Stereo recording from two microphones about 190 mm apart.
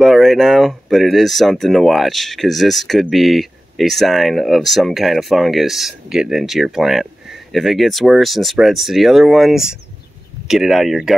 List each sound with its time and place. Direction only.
0.0 s speech: centre (ahead or behind)